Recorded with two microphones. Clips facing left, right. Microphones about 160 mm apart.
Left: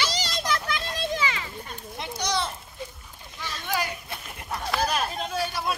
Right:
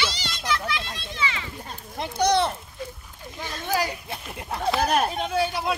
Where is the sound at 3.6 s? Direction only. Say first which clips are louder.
Right 4 dB; 35° right (ahead or behind).